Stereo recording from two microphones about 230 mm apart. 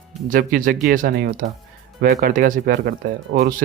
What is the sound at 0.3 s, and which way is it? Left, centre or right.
A man's voice, right.